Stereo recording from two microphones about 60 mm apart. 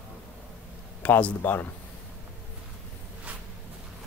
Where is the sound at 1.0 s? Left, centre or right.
Left.